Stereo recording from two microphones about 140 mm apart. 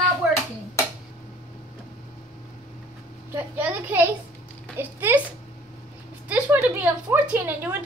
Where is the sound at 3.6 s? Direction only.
15° right (ahead or behind).